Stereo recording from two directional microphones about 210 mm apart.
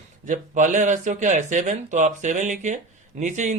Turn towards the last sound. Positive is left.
turn(degrees=-35)  # may be behind; listen again after turning